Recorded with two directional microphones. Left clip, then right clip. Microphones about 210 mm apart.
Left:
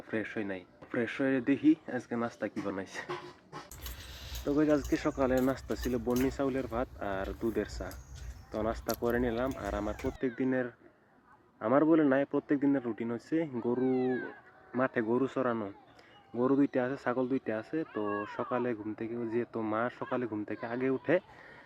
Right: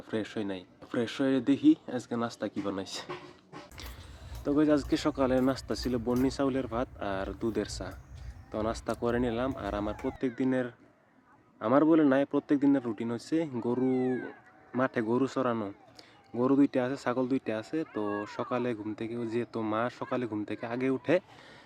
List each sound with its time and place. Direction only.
0.1 s speech: 15° right (ahead or behind)
4.1 s speech: 5° right (ahead or behind)
18.0 s speech: 20° right (ahead or behind)
18.3 s speech: 5° right (ahead or behind)